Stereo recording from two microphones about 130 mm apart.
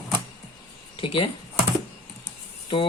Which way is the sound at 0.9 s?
40° left (ahead or behind).